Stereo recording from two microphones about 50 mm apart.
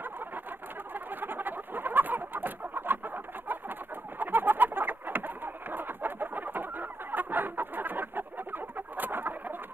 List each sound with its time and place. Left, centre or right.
0.9 s bird: right
4.2 s bird: right